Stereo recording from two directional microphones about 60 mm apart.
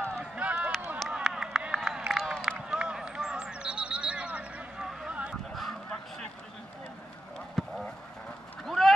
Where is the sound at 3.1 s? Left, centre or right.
Centre.